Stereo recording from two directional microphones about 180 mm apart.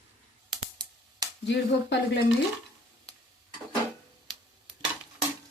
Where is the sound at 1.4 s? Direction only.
75° left (ahead or behind).